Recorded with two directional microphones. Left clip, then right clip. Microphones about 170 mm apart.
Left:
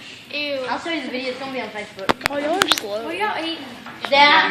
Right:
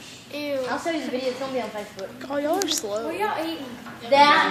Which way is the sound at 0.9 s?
60° right (ahead or behind).